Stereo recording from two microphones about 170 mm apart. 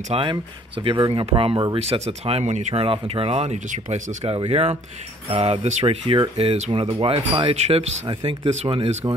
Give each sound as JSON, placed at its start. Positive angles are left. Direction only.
{"t": 0.1, "sound": "speech", "side_deg": -30}